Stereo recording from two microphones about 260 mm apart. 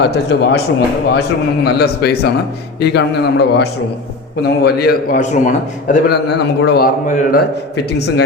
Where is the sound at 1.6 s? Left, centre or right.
Left.